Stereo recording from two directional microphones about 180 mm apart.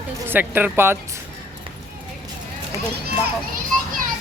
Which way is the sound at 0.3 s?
10° right (ahead or behind).